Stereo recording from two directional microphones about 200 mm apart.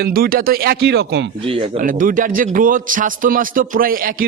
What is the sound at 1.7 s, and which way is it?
A man's voice, 45° right (ahead or behind).